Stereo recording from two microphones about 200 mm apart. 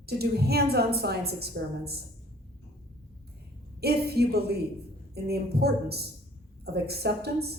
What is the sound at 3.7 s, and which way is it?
A woman's voice, 50° right (ahead or behind).